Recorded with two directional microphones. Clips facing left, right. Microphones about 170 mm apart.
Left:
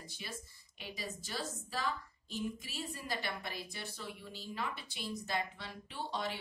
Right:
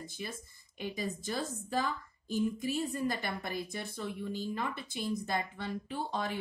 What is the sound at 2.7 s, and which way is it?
A woman's voice, 50° right (ahead or behind).